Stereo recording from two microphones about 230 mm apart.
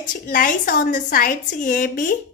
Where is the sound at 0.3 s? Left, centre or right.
Left.